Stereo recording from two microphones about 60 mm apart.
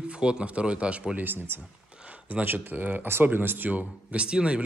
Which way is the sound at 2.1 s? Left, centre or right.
Right.